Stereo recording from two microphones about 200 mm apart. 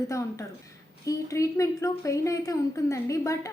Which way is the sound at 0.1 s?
15° left (ahead or behind).